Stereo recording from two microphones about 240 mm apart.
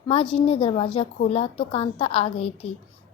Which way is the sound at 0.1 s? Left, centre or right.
Left.